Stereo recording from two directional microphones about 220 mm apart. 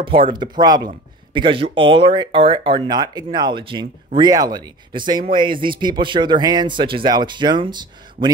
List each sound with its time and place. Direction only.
0.0 s speech: 25° right (ahead or behind)